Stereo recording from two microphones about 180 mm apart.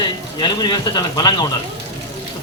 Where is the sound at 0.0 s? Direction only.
25° left (ahead or behind).